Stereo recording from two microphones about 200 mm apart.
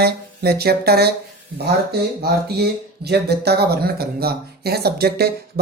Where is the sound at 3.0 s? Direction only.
55° right (ahead or behind).